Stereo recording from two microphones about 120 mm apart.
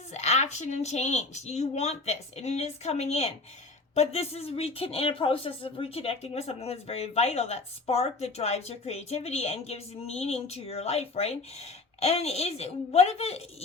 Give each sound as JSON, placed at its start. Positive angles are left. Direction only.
{"t": 0.1, "sound": "speech", "side_deg": 70}